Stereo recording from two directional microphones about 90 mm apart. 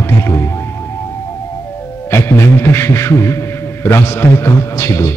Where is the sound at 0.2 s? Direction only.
30° left (ahead or behind).